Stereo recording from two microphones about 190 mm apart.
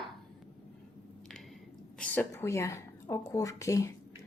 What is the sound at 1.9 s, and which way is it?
Speech, 5° left (ahead or behind).